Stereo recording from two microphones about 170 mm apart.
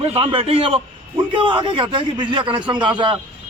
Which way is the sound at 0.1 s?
35° right (ahead or behind).